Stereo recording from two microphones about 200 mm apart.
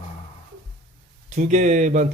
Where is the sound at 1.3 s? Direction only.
35° right (ahead or behind).